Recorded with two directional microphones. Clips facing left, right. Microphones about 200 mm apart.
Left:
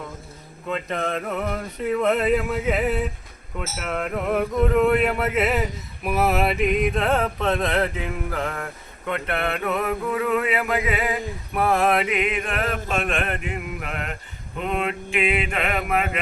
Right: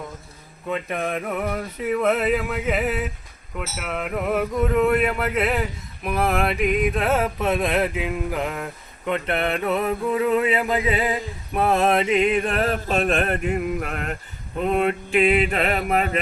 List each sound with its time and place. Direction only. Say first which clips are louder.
0.7 s male singing: even; 10° right (ahead or behind)
3.8 s a sound: left 1 dB; 5° right (ahead or behind); by 14.2 s 45° right (ahead or behind)
14.6 s mantra: right 5 dB; 40° right (ahead or behind)